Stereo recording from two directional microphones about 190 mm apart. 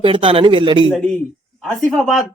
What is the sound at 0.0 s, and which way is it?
Speech, 30° right (ahead or behind).